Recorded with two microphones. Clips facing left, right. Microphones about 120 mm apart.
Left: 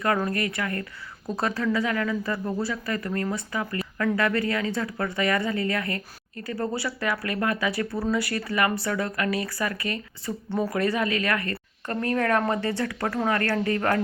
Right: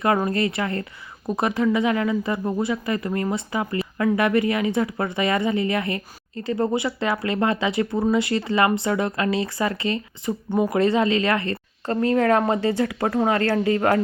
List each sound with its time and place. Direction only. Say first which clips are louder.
0.0 s speech: right 4 dB; 20° right (ahead or behind)